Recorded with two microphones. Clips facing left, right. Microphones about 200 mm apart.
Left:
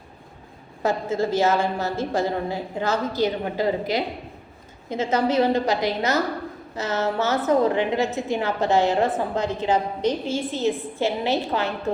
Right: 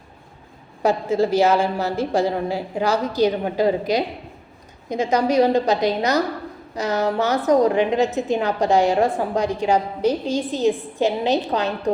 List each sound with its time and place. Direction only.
0.8 s a woman's voice: 15° right (ahead or behind)